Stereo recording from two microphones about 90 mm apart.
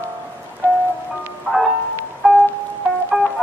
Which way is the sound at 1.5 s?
Centre (ahead or behind).